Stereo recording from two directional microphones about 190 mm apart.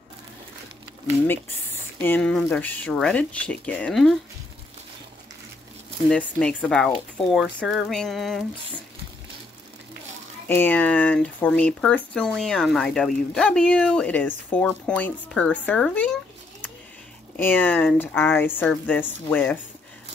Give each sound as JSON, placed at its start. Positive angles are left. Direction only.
{"t": 2.0, "sound": "speech", "side_deg": 5}
{"t": 6.0, "sound": "speech", "side_deg": 5}
{"t": 10.5, "sound": "speech", "side_deg": 10}
{"t": 17.4, "sound": "speech", "side_deg": 10}